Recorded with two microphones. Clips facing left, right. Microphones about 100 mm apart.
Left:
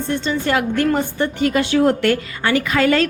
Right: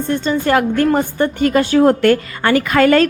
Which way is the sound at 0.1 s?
45° right (ahead or behind).